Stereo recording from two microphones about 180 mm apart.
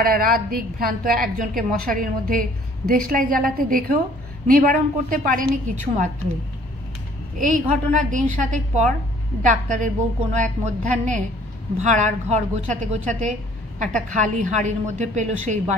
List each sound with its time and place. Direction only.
0.0 s a woman's voice: 55° right (ahead or behind)
7.3 s a woman's voice: 45° right (ahead or behind)